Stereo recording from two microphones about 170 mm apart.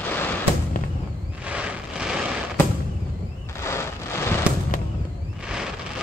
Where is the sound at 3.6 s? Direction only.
15° left (ahead or behind).